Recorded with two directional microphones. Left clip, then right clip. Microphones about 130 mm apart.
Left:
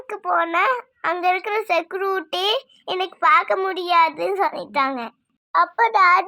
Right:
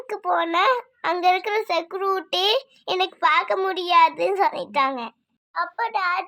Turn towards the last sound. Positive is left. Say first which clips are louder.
# left 8 dB
turn(degrees=35)  # may be behind; listen again after turning